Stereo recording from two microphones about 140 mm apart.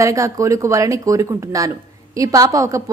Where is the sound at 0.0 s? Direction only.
20° right (ahead or behind).